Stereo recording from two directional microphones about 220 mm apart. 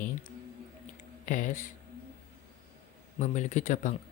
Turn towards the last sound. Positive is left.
turn(degrees=35)  # may be behind; listen again after turning